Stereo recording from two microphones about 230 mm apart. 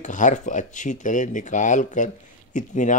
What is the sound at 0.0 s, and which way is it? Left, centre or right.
Speech, left.